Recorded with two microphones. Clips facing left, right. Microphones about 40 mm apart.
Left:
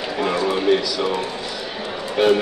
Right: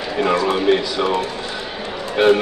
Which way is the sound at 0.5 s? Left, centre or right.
Right.